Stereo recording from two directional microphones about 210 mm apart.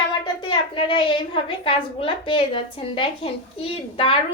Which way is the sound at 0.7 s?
25° left (ahead or behind).